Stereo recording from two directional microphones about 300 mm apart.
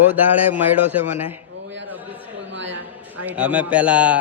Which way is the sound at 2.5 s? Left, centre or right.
Right.